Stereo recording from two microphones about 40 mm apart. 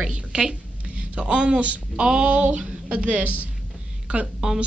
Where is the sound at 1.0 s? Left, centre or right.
Right.